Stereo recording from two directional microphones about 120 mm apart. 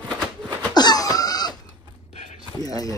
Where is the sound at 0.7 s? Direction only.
35° left (ahead or behind).